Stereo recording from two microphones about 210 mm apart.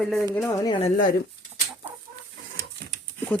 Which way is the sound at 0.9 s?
40° left (ahead or behind).